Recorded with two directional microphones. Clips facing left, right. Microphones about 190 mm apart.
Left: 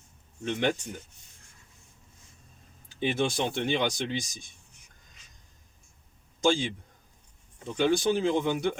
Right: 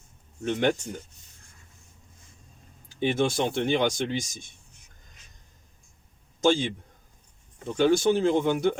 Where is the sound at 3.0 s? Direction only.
45° right (ahead or behind).